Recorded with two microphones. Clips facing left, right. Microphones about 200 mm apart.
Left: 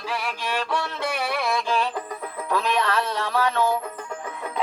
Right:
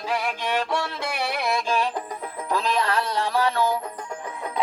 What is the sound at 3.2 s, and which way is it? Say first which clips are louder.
Music: right 2 dB; 30° right (ahead or behind).